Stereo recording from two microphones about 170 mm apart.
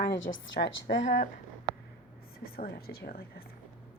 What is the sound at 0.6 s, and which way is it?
Speech, 90° left.